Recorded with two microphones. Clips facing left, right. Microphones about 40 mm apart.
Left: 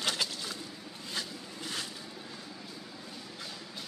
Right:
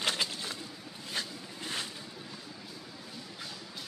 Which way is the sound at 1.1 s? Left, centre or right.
Right.